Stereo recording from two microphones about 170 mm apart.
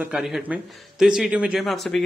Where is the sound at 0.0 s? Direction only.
Centre (ahead or behind).